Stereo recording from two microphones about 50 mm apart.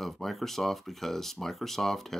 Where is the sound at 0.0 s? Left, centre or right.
Centre.